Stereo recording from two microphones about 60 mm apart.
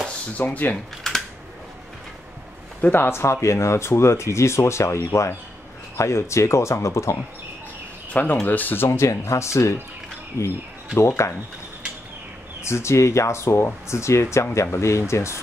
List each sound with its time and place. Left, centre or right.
0.4 s speech: left
1.1 s typing: centre
2.8 s speech: left
8.1 s speech: left
12.6 s speech: left